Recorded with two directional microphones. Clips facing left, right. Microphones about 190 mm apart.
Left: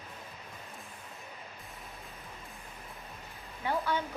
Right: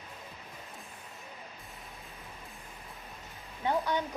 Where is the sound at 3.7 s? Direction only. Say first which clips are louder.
Right 2 dB; 20° right (ahead or behind).